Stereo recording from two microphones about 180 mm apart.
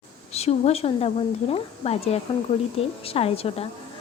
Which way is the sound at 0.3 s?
35° left (ahead or behind).